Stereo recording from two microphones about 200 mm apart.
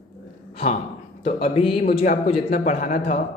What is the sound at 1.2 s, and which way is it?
A man's voice, 30° left (ahead or behind).